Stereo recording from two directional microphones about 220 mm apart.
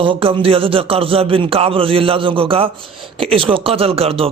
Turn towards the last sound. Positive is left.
turn(degrees=-25)  # may be behind; listen again after turning